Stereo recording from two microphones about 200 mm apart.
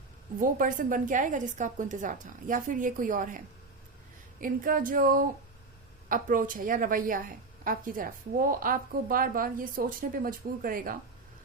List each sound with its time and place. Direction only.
0.3 s a woman's voice: 40° right (ahead or behind)